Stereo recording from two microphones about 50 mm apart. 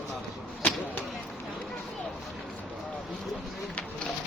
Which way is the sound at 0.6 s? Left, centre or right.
Left.